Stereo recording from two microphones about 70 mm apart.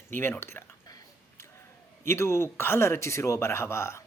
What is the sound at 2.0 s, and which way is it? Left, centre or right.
A man's voice, left.